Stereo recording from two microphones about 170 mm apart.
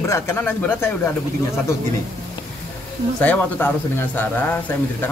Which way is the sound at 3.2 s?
10° left (ahead or behind).